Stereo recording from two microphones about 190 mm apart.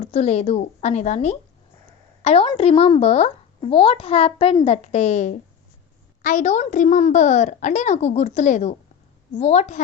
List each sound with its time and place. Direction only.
0.0 s a woman's voice: 35° left (ahead or behind)